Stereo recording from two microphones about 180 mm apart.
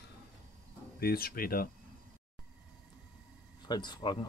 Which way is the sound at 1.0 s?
55° left (ahead or behind).